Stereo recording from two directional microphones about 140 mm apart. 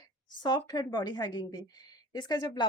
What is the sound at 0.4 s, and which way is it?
Speech, 30° left (ahead or behind).